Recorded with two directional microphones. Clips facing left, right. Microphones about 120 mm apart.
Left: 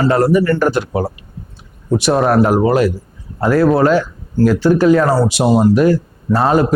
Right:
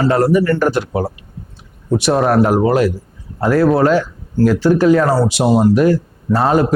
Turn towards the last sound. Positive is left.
turn(degrees=15)  # may be behind; listen again after turning